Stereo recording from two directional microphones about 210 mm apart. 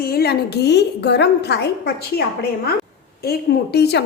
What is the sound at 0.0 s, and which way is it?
A woman's voice, 50° left (ahead or behind).